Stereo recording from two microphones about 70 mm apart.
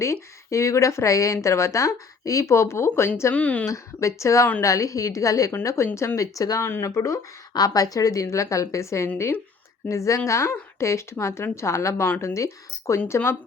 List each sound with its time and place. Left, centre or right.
0.0 s a woman's voice: left
3.3 s speech: left
3.7 s a woman's voice: left
6.1 s speech: left
6.6 s speech: left
6.8 s a woman's voice: left
7.5 s a woman's voice: left